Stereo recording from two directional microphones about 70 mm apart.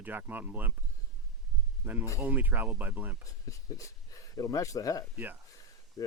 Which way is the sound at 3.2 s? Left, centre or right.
Left.